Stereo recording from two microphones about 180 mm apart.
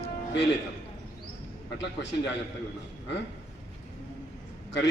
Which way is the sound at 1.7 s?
80° left.